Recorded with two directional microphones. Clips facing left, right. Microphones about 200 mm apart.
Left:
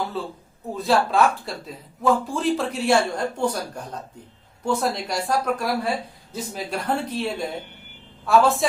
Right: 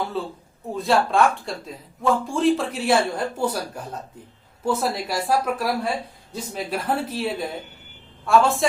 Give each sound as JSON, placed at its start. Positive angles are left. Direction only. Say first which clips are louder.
{"t": 0.1, "sound": "speech", "louder": "right 2 dB", "side_deg": 0}